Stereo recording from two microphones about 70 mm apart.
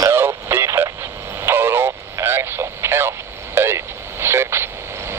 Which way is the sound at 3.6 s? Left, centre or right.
Right.